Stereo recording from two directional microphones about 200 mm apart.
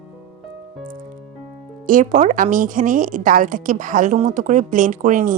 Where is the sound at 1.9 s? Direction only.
40° right (ahead or behind).